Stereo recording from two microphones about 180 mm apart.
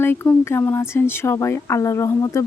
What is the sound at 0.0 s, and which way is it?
Speech, 10° left (ahead or behind).